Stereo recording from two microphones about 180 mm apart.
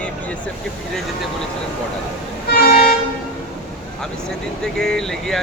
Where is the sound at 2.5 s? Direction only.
55° left (ahead or behind).